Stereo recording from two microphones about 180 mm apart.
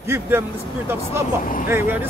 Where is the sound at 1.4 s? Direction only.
50° left (ahead or behind).